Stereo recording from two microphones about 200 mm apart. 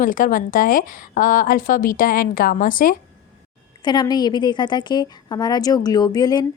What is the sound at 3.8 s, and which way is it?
A woman's voice, 20° left (ahead or behind).